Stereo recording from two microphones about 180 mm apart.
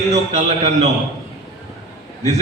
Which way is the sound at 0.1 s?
40° right (ahead or behind).